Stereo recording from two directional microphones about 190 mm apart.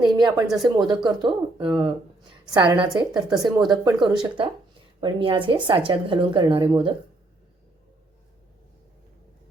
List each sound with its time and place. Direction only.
0.0 s speech: 20° right (ahead or behind)